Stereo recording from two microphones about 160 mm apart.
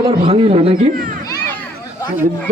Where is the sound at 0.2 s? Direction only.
35° right (ahead or behind).